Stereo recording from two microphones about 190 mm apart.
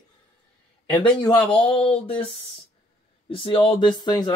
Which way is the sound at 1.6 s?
30° left (ahead or behind).